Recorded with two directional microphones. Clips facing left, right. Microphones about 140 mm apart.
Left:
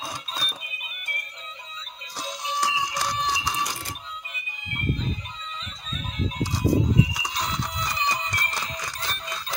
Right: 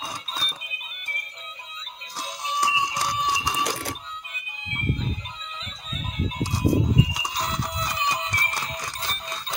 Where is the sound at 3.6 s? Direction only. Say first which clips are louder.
Right 3 dB; 75° right (ahead or behind).